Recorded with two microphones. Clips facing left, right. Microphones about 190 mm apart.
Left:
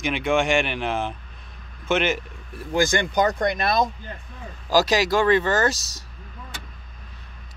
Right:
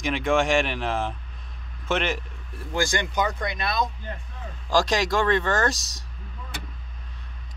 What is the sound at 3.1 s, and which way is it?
Speech, 45° left (ahead or behind).